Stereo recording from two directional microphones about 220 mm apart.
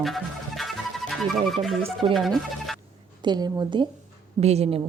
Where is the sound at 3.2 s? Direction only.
20° right (ahead or behind).